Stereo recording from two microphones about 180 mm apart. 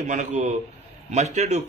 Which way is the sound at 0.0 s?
40° right (ahead or behind).